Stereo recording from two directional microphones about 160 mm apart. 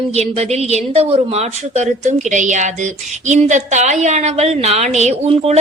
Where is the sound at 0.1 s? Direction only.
40° right (ahead or behind).